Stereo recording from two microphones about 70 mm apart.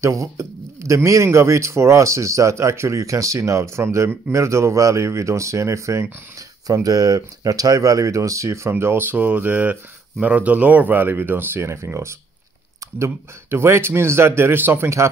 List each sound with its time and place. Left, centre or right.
0.0 s speech: right
6.3 s speech: right